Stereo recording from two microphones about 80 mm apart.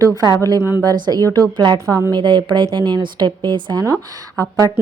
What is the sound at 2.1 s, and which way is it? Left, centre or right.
A woman's voice, right.